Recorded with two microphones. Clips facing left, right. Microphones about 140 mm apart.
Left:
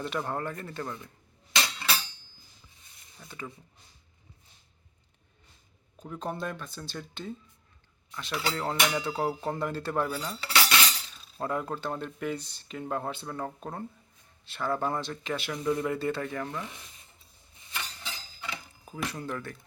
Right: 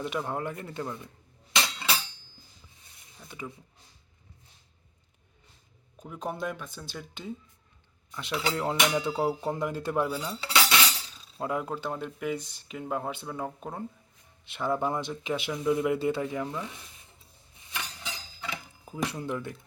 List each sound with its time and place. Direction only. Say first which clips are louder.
0.0 s speech: right 1 dB; 10° right (ahead or behind)
1.5 s a sound: right 1 dB; 20° right (ahead or behind)
3.2 s speech: right 1 dB; 10° right (ahead or behind)
6.0 s speech: right 1 dB; 10° right (ahead or behind)
17.7 s cutlery: right 1 dB; 15° right (ahead or behind)
19.2 s speech: right 3 dB; 20° right (ahead or behind)